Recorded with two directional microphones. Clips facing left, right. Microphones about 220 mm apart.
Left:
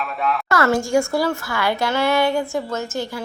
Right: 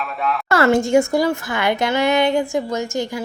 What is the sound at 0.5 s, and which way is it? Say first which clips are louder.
Speech: right 4 dB; 25° right (ahead or behind).